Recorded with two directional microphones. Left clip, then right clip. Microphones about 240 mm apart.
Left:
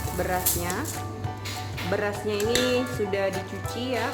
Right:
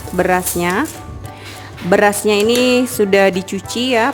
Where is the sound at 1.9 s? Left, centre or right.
Right.